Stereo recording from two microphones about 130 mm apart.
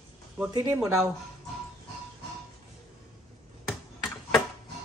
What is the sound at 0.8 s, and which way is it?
Speech, 5° right (ahead or behind).